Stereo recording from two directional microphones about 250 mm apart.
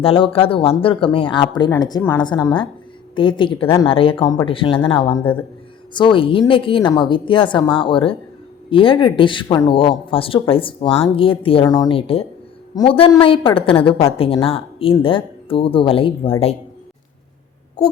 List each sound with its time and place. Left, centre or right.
0.0 s a woman's voice: left